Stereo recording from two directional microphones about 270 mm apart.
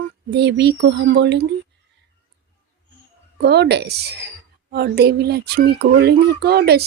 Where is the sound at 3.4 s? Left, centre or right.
Right.